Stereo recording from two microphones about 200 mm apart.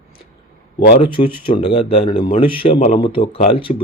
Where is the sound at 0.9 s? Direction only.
25° left (ahead or behind).